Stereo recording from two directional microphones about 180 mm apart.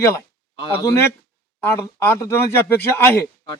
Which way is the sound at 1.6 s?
15° left (ahead or behind).